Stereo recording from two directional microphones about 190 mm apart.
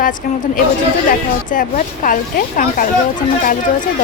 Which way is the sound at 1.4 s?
45° left (ahead or behind).